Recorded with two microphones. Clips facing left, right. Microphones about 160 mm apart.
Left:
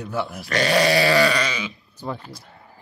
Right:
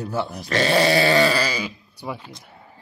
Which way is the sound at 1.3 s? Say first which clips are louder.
Right 1 dB; 35° right (ahead or behind).